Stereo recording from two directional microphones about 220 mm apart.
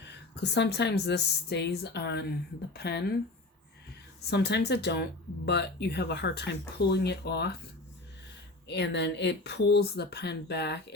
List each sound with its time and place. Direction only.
0.0 s speech: 50° left (ahead or behind)
4.3 s speech: 50° left (ahead or behind)
8.6 s speech: 50° left (ahead or behind)